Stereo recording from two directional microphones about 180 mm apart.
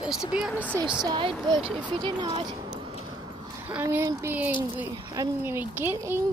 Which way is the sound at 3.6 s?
10° right (ahead or behind).